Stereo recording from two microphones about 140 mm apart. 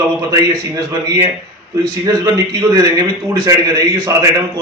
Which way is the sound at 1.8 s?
25° right (ahead or behind).